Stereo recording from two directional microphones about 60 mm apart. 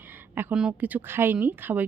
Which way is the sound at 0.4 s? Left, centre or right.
Right.